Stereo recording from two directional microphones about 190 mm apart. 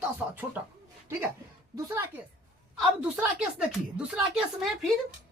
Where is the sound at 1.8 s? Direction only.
15° right (ahead or behind).